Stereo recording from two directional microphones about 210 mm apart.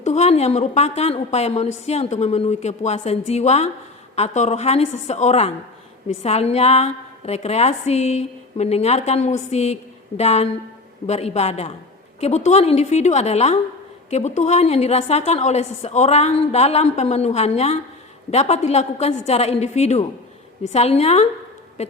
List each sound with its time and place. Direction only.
0.0 s a woman's voice: 30° left (ahead or behind)